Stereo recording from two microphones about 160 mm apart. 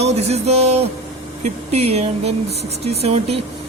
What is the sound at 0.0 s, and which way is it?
Speech, 40° right (ahead or behind).